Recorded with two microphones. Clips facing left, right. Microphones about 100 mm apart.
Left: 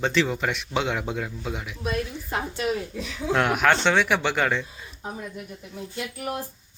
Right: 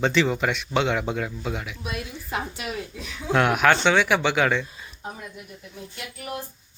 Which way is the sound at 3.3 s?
Centre (ahead or behind).